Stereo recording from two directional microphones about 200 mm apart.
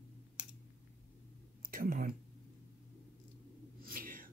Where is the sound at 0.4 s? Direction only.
5° right (ahead or behind).